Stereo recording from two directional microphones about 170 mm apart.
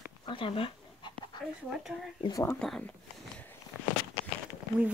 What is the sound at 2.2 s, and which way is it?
Speech, 20° left (ahead or behind).